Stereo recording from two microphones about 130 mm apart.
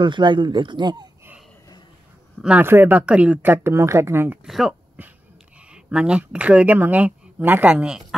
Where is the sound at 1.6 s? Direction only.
30° left (ahead or behind).